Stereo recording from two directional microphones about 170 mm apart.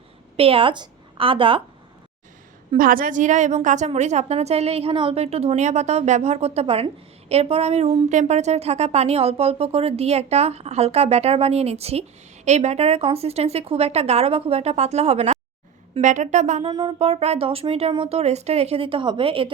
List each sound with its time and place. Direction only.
0.3 s a woman's voice: 35° right (ahead or behind)
2.7 s a woman's voice: 55° right (ahead or behind)
16.6 s music: 25° right (ahead or behind)
17.1 s a woman's voice: 40° right (ahead or behind)